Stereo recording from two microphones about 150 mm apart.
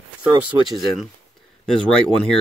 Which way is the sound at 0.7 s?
Centre (ahead or behind).